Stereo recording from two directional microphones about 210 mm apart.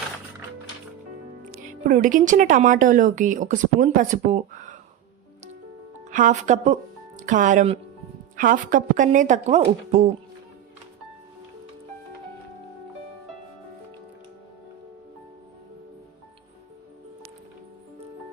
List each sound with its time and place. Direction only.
1.8 s speech: 40° right (ahead or behind)
6.1 s speech: 35° right (ahead or behind)